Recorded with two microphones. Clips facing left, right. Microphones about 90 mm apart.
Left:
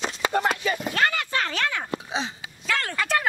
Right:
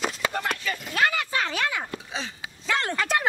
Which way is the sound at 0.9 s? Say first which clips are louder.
Right 2 dB; 10° right (ahead or behind).